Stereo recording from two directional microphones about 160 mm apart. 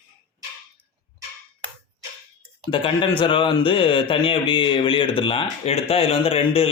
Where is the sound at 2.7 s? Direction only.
30° left (ahead or behind).